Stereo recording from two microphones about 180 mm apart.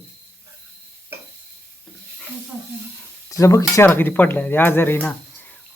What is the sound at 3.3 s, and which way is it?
Speech, 15° left (ahead or behind).